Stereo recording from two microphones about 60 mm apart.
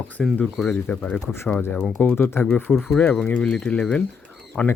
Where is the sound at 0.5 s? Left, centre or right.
Centre.